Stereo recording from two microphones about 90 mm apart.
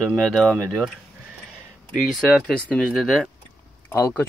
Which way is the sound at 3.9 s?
35° left (ahead or behind).